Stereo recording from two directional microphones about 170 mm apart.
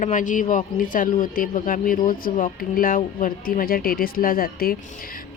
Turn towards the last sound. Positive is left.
turn(degrees=60)  # may be behind; listen again after turning